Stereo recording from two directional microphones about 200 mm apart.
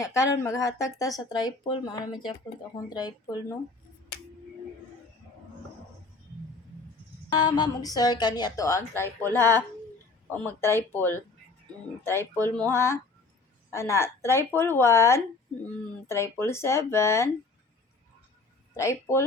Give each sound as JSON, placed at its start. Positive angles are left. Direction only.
{"t": 0.0, "sound": "a woman's voice", "side_deg": 15}
{"t": 7.3, "sound": "a woman's voice", "side_deg": 20}
{"t": 18.8, "sound": "speech", "side_deg": 15}